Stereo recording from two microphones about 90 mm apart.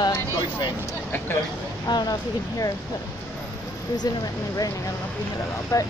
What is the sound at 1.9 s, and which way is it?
Speech, 50° left (ahead or behind).